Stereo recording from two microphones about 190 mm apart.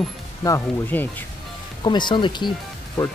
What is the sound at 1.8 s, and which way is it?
Speech, 25° left (ahead or behind).